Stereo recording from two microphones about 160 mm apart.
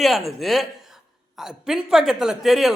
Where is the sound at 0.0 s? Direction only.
Centre (ahead or behind).